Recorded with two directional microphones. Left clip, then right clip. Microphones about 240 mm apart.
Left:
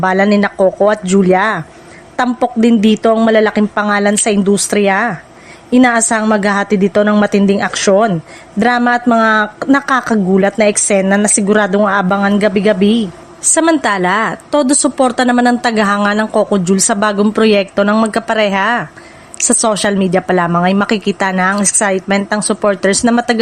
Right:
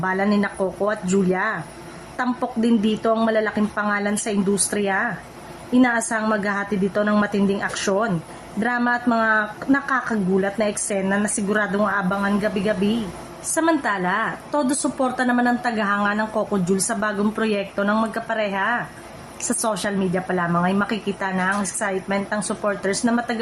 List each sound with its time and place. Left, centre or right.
0.0 s a woman's voice: left